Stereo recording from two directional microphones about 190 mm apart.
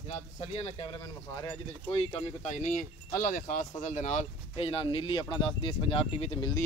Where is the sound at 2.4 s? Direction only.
40° left (ahead or behind).